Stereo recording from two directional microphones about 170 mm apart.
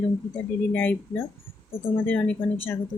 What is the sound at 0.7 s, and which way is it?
A woman's voice, 10° left (ahead or behind).